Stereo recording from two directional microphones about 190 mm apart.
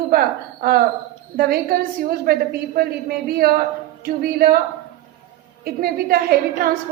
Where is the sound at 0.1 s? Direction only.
50° right (ahead or behind).